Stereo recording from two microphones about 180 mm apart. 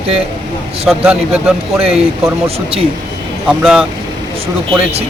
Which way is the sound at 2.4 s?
30° right (ahead or behind).